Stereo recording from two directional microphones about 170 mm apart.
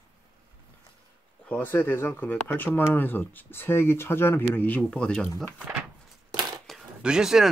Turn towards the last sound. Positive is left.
turn(degrees=-5)  # may be behind; listen again after turning